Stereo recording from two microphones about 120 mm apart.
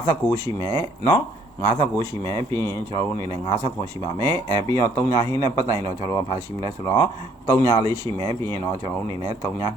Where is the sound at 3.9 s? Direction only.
20° left (ahead or behind).